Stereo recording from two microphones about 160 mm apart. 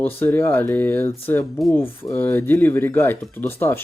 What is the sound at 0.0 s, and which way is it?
Speech, 15° left (ahead or behind).